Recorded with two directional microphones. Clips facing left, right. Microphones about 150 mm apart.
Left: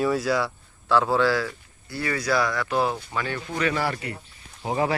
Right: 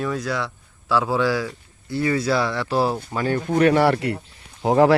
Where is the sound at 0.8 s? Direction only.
5° right (ahead or behind); by 4.9 s 80° right.